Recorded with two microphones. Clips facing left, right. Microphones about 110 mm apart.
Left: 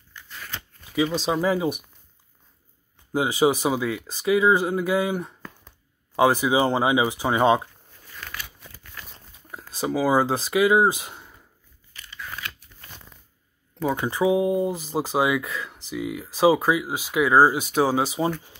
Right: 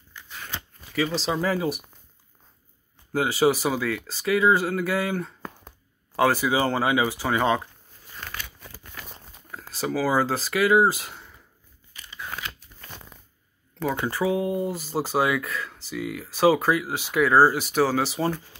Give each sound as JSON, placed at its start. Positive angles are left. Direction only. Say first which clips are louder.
{"t": 0.4, "sound": "shuffling cards", "louder": "right 1 dB", "side_deg": -15}
{"t": 1.2, "sound": "speech", "louder": "left 2 dB", "side_deg": 15}
{"t": 3.1, "sound": "speech", "louder": "left 1 dB", "side_deg": 15}
{"t": 8.1, "sound": "a sound", "louder": "even", "side_deg": -25}
{"t": 9.0, "sound": "crumpling", "louder": "right 3 dB", "side_deg": -40}
{"t": 9.5, "sound": "speech", "louder": "left 2 dB", "side_deg": 15}
{"t": 11.9, "sound": "scissors", "louder": "right 1 dB", "side_deg": -20}
{"t": 13.8, "sound": "speech", "louder": "left 3 dB", "side_deg": 15}